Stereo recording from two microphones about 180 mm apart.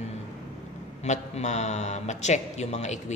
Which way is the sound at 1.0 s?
40° left (ahead or behind).